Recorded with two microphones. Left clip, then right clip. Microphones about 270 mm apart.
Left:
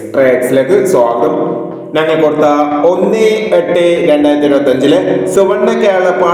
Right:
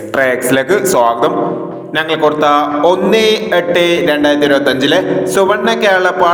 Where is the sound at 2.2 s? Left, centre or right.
Right.